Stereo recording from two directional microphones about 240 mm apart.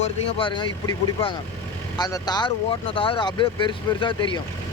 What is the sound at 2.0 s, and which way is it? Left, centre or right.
Speech, centre.